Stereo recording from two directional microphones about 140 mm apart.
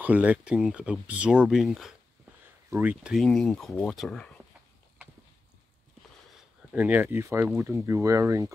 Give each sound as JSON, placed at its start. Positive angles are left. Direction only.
{"t": 0.0, "sound": "speech", "side_deg": -10}
{"t": 2.7, "sound": "speech", "side_deg": -10}
{"t": 6.7, "sound": "speech", "side_deg": -10}